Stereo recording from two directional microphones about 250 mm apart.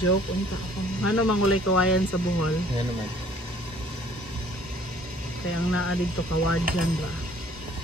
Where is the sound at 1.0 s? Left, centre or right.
Left.